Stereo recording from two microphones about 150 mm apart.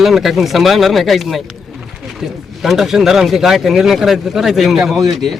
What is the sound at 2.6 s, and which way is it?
A man's voice, centre (ahead or behind).